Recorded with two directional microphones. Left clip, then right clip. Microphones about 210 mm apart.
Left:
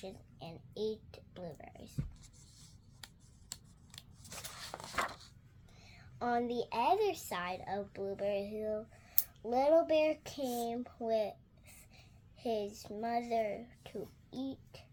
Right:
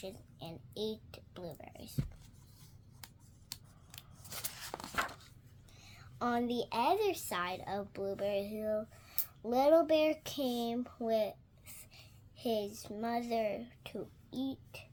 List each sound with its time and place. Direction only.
0.0 s speech: 15° right (ahead or behind)
4.8 s a sound: 10° left (ahead or behind)
5.7 s a woman's voice: 20° right (ahead or behind)